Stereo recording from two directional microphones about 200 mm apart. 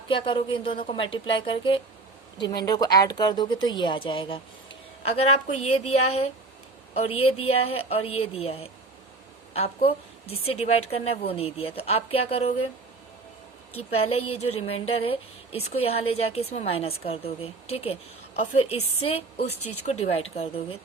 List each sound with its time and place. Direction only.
0.1 s a woman's voice: 25° left (ahead or behind)
14.1 s a woman's voice: 30° left (ahead or behind)
19.5 s speech: 90° left
19.8 s a woman's voice: 30° left (ahead or behind)